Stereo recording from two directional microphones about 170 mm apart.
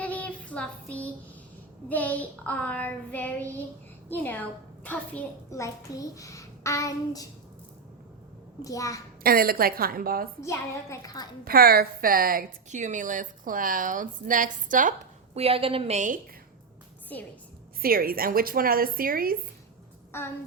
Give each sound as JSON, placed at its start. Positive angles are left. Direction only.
{"t": 0.0, "sound": "child singing", "side_deg": 10}
{"t": 4.1, "sound": "a child's voice", "side_deg": 10}
{"t": 8.6, "sound": "a child's voice", "side_deg": 20}
{"t": 9.2, "sound": "speech", "side_deg": -60}
{"t": 10.4, "sound": "child singing", "side_deg": 15}
{"t": 11.4, "sound": "a woman's voice", "side_deg": -60}
{"t": 15.4, "sound": "a woman's voice", "side_deg": -35}
{"t": 17.1, "sound": "child singing", "side_deg": 10}
{"t": 17.8, "sound": "speech", "side_deg": -60}